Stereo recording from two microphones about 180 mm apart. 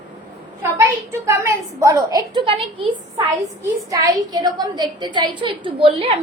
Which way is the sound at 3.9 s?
20° right (ahead or behind).